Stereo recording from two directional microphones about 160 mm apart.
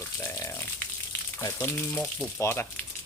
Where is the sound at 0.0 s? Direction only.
15° left (ahead or behind).